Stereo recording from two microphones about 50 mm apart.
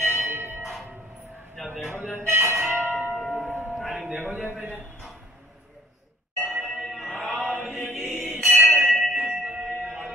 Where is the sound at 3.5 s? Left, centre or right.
Right.